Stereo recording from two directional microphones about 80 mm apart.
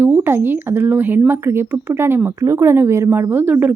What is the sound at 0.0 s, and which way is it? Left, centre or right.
A woman's voice, right.